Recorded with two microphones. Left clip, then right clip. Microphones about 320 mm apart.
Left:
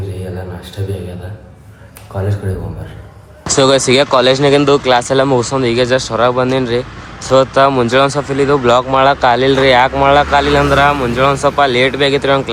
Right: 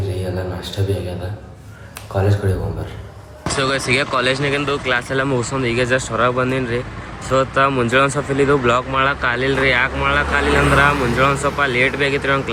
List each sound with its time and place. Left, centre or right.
2.1 s speech: centre
3.6 s speech: centre